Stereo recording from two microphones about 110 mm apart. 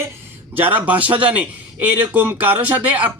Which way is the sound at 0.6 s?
15° right (ahead or behind).